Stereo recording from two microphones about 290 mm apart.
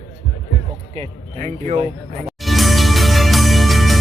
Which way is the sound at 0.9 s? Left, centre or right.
Right.